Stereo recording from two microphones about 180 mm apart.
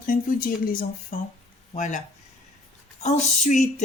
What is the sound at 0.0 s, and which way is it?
Speech, 50° left (ahead or behind).